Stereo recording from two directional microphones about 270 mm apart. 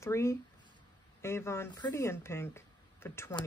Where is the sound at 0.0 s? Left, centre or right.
Centre.